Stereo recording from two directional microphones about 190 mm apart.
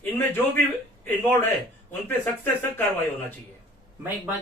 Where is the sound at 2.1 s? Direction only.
10° left (ahead or behind).